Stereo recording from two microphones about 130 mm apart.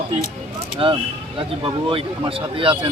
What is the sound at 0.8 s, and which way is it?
A man's voice, 35° right (ahead or behind).